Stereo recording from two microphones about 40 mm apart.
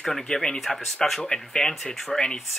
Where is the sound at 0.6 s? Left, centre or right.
Centre.